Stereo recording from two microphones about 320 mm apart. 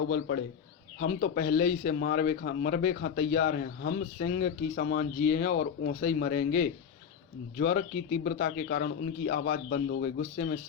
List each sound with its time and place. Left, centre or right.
0.1 s speech: left